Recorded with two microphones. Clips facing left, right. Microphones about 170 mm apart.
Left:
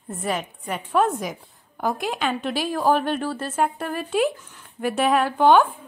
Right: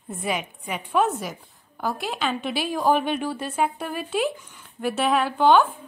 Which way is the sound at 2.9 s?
10° right (ahead or behind).